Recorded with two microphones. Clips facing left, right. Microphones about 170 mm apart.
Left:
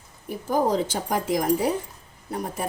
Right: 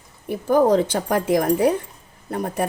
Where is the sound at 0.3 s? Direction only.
65° right (ahead or behind).